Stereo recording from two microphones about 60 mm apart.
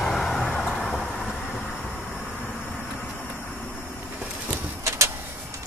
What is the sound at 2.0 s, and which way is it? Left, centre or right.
Vehicle, centre.